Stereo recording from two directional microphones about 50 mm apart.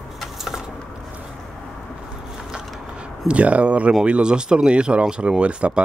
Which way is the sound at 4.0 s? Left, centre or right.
Right.